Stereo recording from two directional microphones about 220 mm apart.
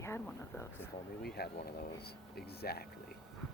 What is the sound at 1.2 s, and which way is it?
Speech, 45° left (ahead or behind).